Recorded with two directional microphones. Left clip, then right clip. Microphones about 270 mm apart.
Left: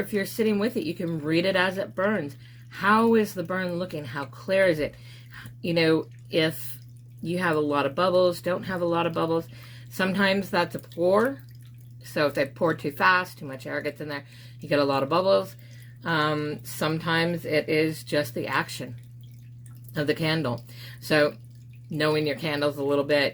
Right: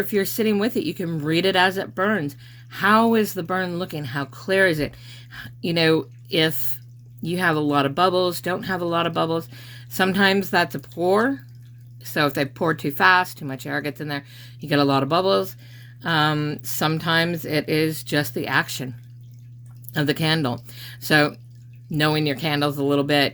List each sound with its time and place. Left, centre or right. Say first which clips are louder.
0.1 s speech: right 2 dB; right
19.9 s speech: right 4 dB; right